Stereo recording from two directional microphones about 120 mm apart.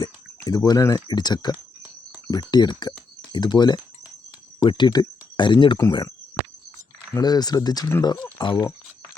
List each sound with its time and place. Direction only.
0.0 s speech: 35° left (ahead or behind)
1.5 s a sound: 15° right (ahead or behind)
2.3 s speech: 35° left (ahead or behind)